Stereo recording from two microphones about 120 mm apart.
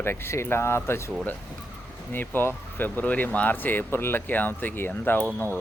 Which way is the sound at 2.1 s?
15° left (ahead or behind).